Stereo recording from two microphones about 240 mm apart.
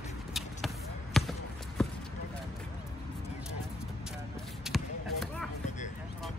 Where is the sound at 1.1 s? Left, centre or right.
Centre.